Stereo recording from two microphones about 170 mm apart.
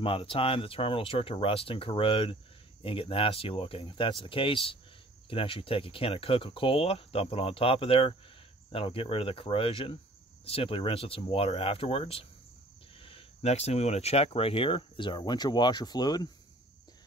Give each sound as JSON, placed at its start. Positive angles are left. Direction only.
{"t": 0.0, "sound": "speech", "side_deg": 30}